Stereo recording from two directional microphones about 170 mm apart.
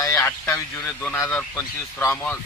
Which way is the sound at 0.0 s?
20° left (ahead or behind).